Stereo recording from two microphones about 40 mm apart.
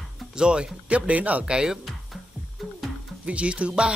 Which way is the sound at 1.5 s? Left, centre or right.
Right.